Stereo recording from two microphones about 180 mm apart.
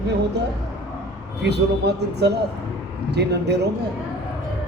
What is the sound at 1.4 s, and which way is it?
A man's voice, 70° right (ahead or behind).